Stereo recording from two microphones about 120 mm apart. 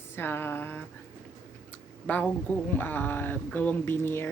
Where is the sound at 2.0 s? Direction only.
15° left (ahead or behind).